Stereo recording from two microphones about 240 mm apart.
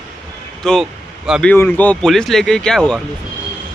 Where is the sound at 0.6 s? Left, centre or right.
Centre.